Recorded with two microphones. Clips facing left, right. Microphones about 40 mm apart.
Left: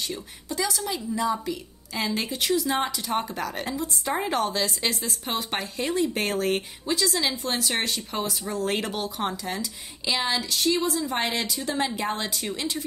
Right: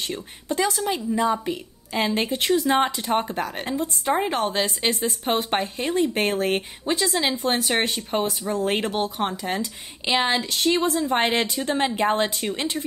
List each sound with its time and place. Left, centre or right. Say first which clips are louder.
0.1 s speech: right 5 dB; right
3.2 s speech: right 3 dB; right